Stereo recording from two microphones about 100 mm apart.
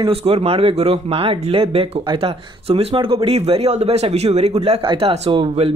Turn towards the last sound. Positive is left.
turn(degrees=-65)  # may be behind; listen again after turning